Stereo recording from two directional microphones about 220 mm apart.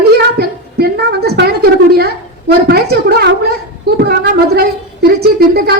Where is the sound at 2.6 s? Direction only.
45° right (ahead or behind).